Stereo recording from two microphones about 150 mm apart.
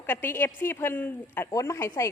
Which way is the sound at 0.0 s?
15° left (ahead or behind).